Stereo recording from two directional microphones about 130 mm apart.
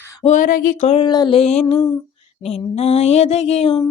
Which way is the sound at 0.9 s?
40° left (ahead or behind).